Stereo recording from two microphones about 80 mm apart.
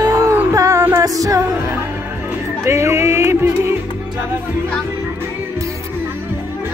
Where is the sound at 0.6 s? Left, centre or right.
Right.